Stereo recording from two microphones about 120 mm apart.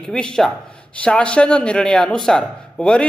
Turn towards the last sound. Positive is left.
turn(degrees=5)  # may be behind; listen again after turning